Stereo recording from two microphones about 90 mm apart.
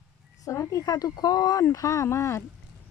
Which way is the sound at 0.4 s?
35° left (ahead or behind).